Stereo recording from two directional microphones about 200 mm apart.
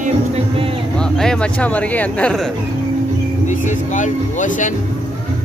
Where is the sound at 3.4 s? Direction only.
40° left (ahead or behind).